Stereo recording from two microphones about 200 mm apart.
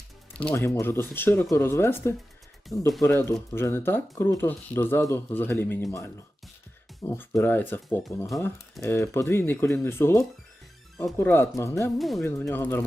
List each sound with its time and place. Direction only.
0.3 s speech: 10° left (ahead or behind)
7.1 s speech: 10° left (ahead or behind)
8.8 s speech: 15° left (ahead or behind)
11.9 s speech: centre (ahead or behind)
12.2 s speech: 10° left (ahead or behind)